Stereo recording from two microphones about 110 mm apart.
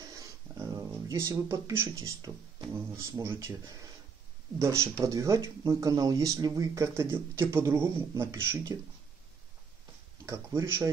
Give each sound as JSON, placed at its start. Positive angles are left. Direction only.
{"t": 0.0, "sound": "a sound", "side_deg": -30}
{"t": 1.9, "sound": "speech", "side_deg": -35}
{"t": 10.2, "sound": "speech", "side_deg": -25}